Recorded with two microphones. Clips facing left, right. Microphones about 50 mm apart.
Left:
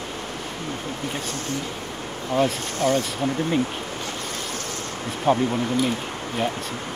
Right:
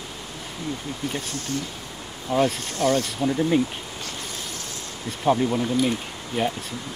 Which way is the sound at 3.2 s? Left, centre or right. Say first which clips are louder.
Right 1 dB; left.